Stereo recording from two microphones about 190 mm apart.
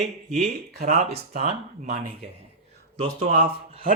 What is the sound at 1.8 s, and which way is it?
Speech, 55° right (ahead or behind).